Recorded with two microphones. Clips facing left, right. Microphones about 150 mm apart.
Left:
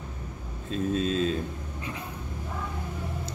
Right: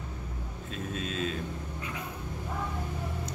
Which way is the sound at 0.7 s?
35° left (ahead or behind).